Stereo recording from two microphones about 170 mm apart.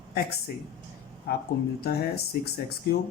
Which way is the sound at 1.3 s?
70° left (ahead or behind).